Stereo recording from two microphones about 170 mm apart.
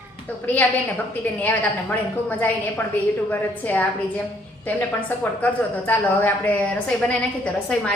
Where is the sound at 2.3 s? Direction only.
10° left (ahead or behind).